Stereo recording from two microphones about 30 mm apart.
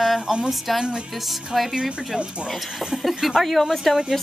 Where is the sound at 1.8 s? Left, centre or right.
Right.